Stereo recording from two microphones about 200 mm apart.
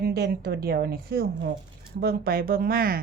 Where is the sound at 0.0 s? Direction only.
50° right (ahead or behind).